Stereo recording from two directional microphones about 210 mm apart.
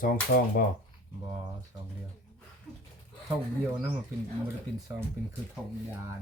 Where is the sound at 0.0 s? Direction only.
40° left (ahead or behind).